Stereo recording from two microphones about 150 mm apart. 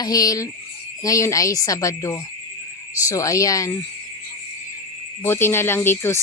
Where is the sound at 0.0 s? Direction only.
25° left (ahead or behind).